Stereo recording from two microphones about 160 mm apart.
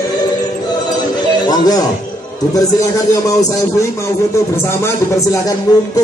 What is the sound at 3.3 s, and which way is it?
Speech, 20° left (ahead or behind).